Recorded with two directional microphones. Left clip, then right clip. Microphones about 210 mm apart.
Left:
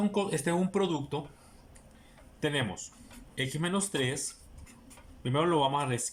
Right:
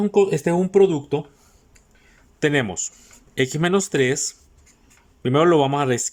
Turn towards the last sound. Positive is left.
turn(degrees=-50)  # may be behind; listen again after turning